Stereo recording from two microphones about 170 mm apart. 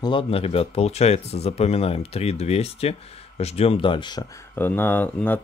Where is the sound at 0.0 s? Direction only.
30° left (ahead or behind).